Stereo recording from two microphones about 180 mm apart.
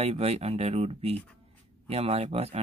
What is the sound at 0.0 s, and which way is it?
Speech, 35° right (ahead or behind).